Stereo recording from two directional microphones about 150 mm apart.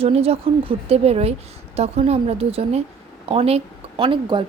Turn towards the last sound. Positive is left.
turn(degrees=-35)  # may be behind; listen again after turning